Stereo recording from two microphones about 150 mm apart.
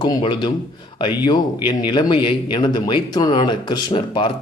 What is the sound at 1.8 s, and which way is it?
Speech, 30° left (ahead or behind).